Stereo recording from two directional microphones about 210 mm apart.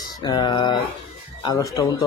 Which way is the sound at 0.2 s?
20° left (ahead or behind).